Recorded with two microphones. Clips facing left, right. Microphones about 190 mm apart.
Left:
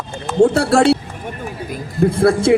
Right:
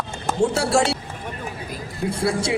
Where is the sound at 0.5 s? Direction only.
60° left (ahead or behind).